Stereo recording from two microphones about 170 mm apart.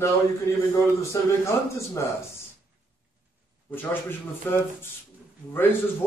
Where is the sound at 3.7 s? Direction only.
10° left (ahead or behind).